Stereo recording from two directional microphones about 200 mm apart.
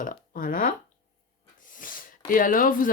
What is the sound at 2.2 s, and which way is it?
Speech, 45° left (ahead or behind).